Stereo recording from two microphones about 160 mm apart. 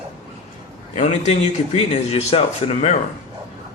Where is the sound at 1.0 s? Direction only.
45° left (ahead or behind).